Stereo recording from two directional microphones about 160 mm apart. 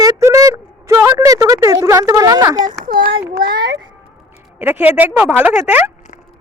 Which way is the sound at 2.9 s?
65° right (ahead or behind).